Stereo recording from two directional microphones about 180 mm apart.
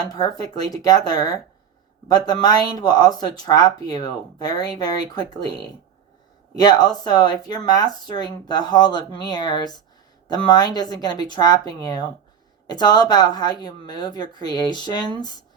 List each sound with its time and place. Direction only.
0.1 s speech: 20° left (ahead or behind)